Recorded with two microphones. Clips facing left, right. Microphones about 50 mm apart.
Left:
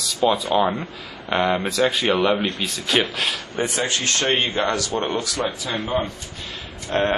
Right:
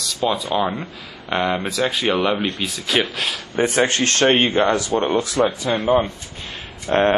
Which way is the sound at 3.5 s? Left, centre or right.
Right.